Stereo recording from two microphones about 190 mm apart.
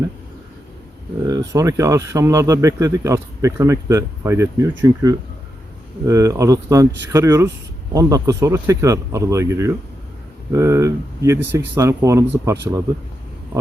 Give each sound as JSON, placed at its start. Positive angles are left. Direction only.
{"t": 1.3, "sound": "speech", "side_deg": -20}